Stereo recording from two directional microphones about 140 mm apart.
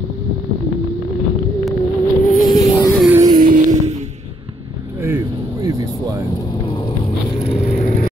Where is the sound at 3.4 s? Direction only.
75° right (ahead or behind).